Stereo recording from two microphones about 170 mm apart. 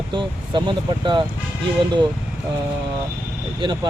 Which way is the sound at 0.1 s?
30° right (ahead or behind).